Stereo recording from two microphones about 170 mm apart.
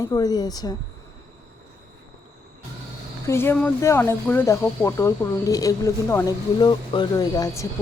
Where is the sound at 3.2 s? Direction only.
15° left (ahead or behind).